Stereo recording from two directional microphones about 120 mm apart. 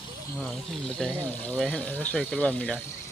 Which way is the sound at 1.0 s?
Centre (ahead or behind).